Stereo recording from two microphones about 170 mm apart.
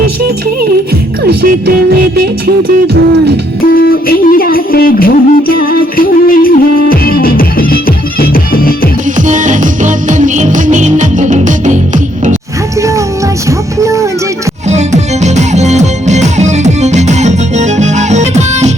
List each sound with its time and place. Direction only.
1.3 s music: 70° right (ahead or behind)
2.8 s music: 80° right
3.8 s music: 60° left (ahead or behind)
9.2 s music: 45° right (ahead or behind)
13.8 s music: 20° right (ahead or behind)
14.7 s music: 40° right (ahead or behind)